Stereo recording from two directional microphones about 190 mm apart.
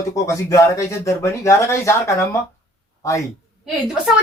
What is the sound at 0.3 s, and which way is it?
A man's voice, 15° left (ahead or behind).